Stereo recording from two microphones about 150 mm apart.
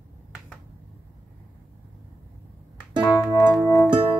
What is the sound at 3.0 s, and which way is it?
Music, 25° left (ahead or behind).